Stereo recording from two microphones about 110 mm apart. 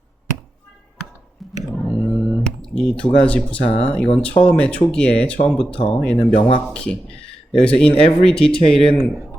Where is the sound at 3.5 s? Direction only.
60° left (ahead or behind).